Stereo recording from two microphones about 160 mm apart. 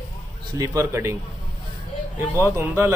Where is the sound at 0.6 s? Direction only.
20° right (ahead or behind).